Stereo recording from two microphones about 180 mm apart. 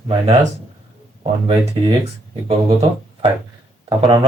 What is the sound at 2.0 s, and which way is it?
Speech, 30° right (ahead or behind).